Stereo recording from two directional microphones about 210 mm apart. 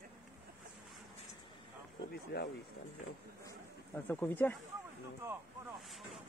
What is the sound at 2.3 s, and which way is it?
Speech, 55° left (ahead or behind).